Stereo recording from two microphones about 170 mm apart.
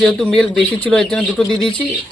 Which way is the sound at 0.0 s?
Centre (ahead or behind).